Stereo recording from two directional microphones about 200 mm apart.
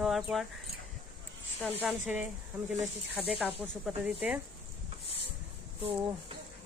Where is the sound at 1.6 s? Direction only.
Centre (ahead or behind).